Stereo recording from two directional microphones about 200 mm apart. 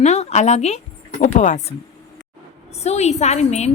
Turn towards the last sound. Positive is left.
turn(degrees=35)  # may be behind; listen again after turning